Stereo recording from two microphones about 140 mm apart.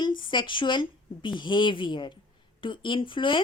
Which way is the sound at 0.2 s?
35° left (ahead or behind).